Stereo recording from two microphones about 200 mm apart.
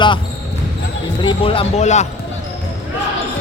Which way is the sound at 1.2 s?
25° left (ahead or behind).